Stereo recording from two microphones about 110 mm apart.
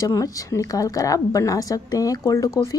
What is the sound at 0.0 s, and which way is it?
Speech, 30° left (ahead or behind).